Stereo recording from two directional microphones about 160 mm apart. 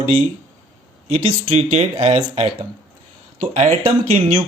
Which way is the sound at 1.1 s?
45° right (ahead or behind).